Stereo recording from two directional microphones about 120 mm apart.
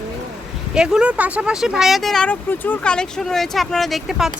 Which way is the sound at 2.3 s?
15° left (ahead or behind).